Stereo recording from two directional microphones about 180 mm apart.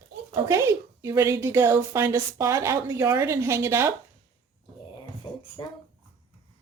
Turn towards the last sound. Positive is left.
turn(degrees=25)  # may be behind; listen again after turning